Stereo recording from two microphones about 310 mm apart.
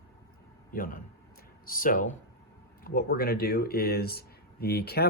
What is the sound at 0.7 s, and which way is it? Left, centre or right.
Speech, left.